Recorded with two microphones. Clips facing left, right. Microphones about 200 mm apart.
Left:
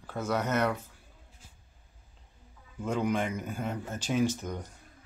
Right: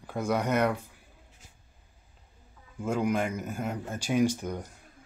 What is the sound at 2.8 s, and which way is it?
Speech, 10° right (ahead or behind).